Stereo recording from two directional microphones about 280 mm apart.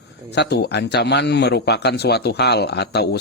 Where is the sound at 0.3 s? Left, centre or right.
Left.